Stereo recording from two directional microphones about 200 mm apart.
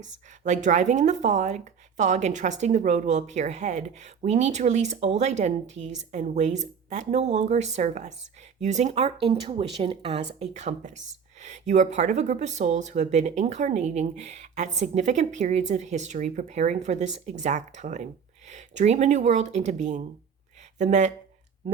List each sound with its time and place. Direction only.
0.0 s speech: 35° right (ahead or behind)